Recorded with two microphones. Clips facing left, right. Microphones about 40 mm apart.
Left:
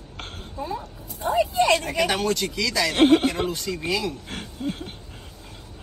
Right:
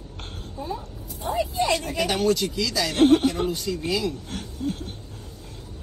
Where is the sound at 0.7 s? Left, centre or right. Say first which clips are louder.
Left 1 dB; left.